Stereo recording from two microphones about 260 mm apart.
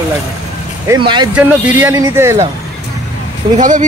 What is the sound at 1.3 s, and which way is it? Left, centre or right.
Speech, centre.